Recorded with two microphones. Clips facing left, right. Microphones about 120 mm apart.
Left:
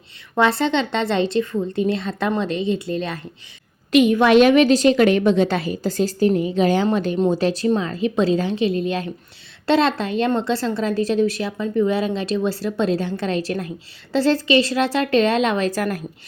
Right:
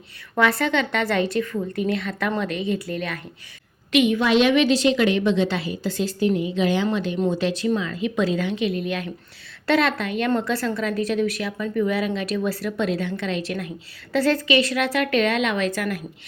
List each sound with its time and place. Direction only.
0.3 s a woman's voice: 25° left (ahead or behind)
3.9 s a woman's voice: 40° left (ahead or behind)
4.2 s a woman's voice: 50° left (ahead or behind)